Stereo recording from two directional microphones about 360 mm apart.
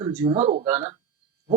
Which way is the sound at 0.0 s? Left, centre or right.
Centre.